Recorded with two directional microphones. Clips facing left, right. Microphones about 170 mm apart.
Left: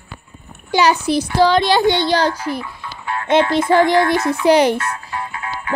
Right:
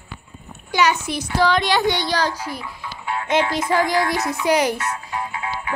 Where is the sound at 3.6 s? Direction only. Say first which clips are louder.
Left 6 dB; 60° left (ahead or behind).